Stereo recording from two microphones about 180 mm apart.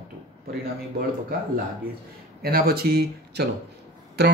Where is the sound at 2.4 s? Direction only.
55° right (ahead or behind).